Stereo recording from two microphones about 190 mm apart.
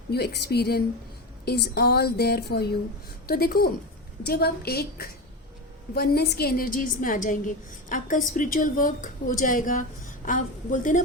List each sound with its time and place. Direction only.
0.1 s a woman's voice: 55° left (ahead or behind)